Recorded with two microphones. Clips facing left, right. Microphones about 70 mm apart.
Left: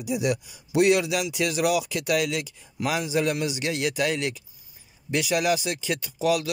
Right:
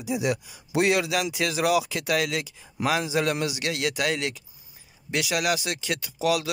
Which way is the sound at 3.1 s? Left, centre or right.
Centre.